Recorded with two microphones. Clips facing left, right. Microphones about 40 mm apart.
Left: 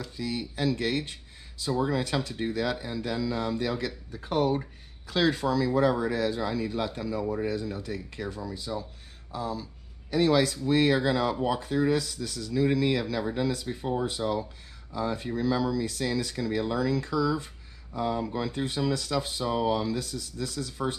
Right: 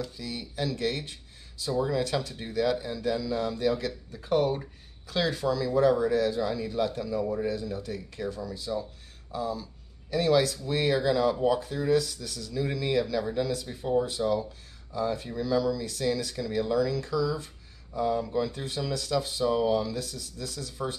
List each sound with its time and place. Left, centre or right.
0.2 s speech: centre
13.0 s speech: left
16.7 s speech: left
17.1 s speech: centre